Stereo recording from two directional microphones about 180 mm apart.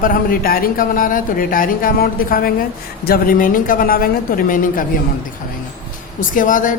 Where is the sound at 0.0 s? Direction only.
50° left (ahead or behind).